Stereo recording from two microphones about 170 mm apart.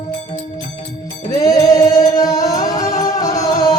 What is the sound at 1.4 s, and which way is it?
Music, 20° left (ahead or behind).